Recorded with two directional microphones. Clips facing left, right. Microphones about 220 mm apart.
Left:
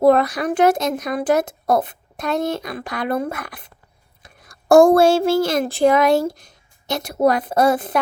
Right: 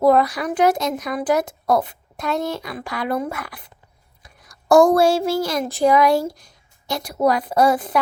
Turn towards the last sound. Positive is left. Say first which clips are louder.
# even
turn(degrees=25)  # may be behind; listen again after turning